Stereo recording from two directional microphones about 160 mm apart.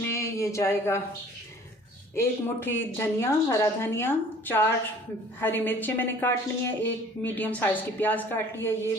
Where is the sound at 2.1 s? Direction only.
15° left (ahead or behind).